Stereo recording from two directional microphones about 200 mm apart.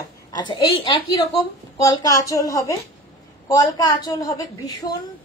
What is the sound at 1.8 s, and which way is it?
A woman's voice, 20° left (ahead or behind).